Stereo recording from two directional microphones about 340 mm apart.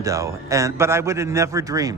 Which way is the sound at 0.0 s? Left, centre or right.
Centre.